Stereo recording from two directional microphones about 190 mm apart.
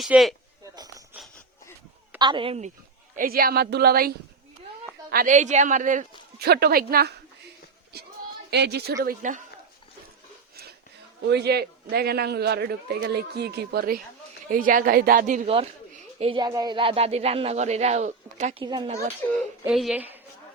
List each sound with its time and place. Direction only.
0.0 s speech: centre (ahead or behind)
2.1 s a woman's voice: 25° right (ahead or behind)
3.2 s speech: 50° right (ahead or behind)
5.1 s speech: 40° right (ahead or behind)
8.4 s a man's voice: 60° right (ahead or behind)
11.2 s a man's voice: 60° right (ahead or behind)
15.4 s speech: 30° right (ahead or behind)
18.6 s a woman's voice: 20° right (ahead or behind)
19.6 s speech: 5° right (ahead or behind)